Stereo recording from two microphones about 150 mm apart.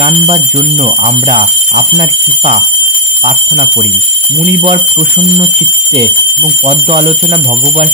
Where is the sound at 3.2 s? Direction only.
40° right (ahead or behind).